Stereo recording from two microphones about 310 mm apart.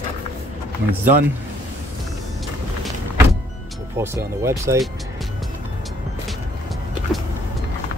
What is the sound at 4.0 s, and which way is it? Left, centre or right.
Speech, centre.